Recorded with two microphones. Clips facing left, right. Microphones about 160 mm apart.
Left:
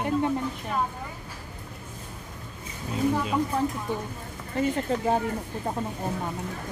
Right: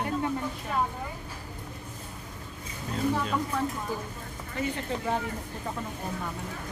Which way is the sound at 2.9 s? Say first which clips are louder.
Left 3 dB; 5° left (ahead or behind).